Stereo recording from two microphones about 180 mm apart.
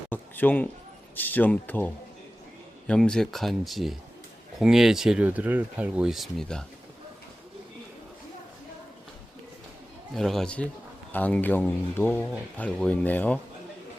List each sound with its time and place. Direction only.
0.1 s a sound: 10° left (ahead or behind)
1.1 s speech: 10° left (ahead or behind)
10.2 s speech: centre (ahead or behind)